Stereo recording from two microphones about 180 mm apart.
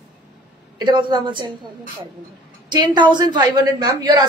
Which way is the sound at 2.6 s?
25° right (ahead or behind).